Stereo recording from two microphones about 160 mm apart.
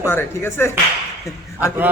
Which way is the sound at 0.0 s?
15° left (ahead or behind).